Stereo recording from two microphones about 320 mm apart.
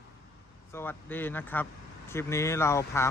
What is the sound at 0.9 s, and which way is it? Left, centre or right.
Speech, centre.